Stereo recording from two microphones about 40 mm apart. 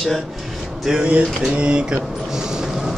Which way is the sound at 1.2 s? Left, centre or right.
Right.